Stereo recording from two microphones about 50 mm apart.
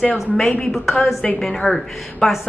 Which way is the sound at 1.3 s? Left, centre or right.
Centre.